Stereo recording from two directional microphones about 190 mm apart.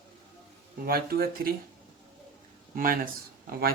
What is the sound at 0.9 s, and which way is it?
Speech, 55° right (ahead or behind).